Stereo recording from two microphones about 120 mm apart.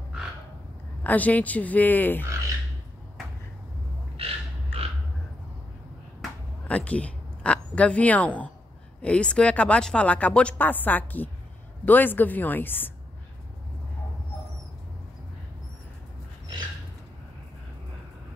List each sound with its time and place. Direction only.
1.0 s a woman's voice: 15° left (ahead or behind)
4.2 s a sound: 55° right (ahead or behind)
6.7 s a woman's voice: 10° left (ahead or behind)